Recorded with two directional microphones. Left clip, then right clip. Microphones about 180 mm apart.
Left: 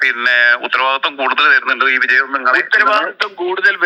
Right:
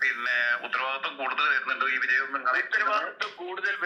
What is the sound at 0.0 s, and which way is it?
Speech, 50° left (ahead or behind).